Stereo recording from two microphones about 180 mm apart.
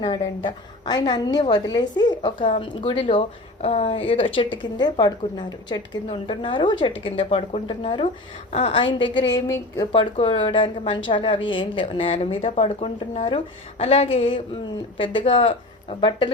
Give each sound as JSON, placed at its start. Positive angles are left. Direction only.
{"t": 0.0, "sound": "speech", "side_deg": 25}